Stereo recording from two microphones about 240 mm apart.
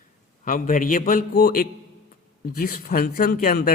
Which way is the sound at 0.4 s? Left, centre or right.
Left.